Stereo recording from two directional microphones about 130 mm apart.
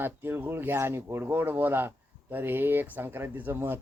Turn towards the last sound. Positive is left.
turn(degrees=-15)  # may be behind; listen again after turning